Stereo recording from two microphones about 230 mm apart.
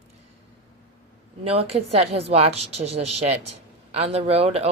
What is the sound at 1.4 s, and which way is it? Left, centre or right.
Speech, right.